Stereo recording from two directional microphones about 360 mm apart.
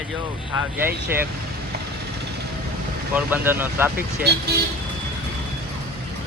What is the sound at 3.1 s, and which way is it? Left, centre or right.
Speech, centre.